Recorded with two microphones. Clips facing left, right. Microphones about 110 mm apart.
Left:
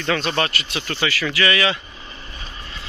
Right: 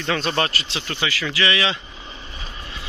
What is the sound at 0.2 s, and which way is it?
Speech, 30° right (ahead or behind).